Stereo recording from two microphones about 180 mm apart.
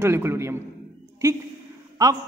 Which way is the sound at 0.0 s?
15° right (ahead or behind).